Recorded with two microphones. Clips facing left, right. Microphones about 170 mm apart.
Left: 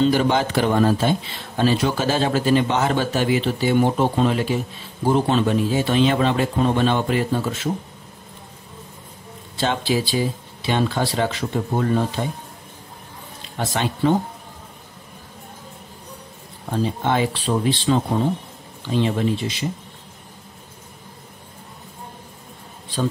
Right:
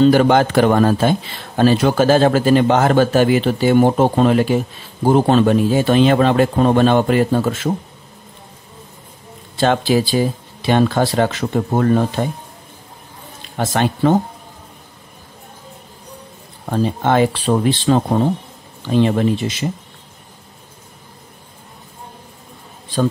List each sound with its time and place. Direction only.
0.0 s speech: 50° right (ahead or behind)
9.6 s speech: 55° right (ahead or behind)
13.6 s speech: 50° right (ahead or behind)
16.7 s speech: 55° right (ahead or behind)